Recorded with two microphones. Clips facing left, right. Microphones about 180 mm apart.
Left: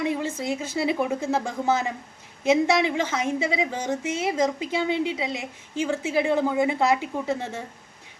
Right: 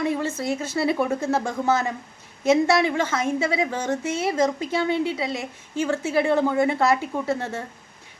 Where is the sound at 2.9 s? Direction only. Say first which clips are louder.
Right 2 dB; 15° left (ahead or behind).